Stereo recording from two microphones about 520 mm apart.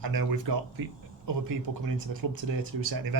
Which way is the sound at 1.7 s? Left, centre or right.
Right.